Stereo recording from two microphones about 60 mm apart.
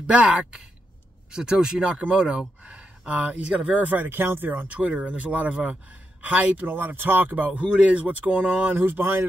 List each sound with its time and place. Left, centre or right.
0.0 s speech: centre
2.6 s a sound: right
3.1 s speech: right
8.7 s speech: right